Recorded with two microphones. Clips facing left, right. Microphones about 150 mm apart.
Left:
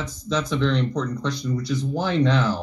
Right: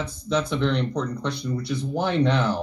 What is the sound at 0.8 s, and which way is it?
Speech, 30° right (ahead or behind).